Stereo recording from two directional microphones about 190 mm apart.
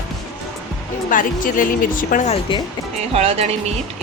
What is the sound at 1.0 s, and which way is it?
A woman's voice, 45° left (ahead or behind).